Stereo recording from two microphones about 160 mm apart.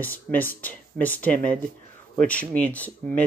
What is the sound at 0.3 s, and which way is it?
Speech, 5° left (ahead or behind).